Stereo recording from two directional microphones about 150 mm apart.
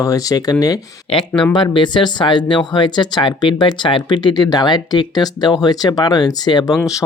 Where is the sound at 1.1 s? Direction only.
35° left (ahead or behind).